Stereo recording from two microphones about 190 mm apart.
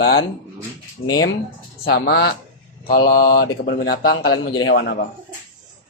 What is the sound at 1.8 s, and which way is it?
Speech, 55° left (ahead or behind).